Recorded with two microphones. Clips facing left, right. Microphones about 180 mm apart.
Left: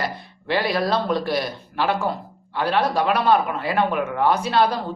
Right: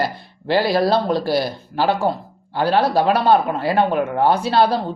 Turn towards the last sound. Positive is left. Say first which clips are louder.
# right 3 dB
turn(degrees=-30)  # may be behind; listen again after turning